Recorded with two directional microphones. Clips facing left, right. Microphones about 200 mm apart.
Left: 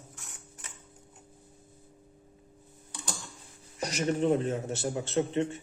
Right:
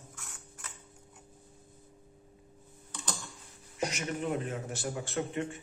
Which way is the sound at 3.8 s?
35° left (ahead or behind).